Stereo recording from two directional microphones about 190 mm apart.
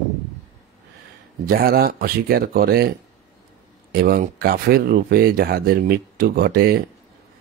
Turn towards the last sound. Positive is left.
turn(degrees=-50)  # may be behind; listen again after turning